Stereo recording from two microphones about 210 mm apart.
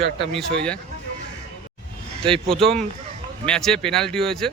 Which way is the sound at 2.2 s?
25° right (ahead or behind).